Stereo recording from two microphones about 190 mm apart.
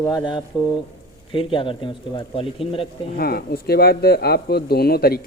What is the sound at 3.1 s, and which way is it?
Speech, 55° left (ahead or behind).